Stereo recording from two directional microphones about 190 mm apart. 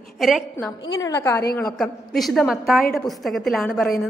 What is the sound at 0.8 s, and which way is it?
Speech, 20° left (ahead or behind).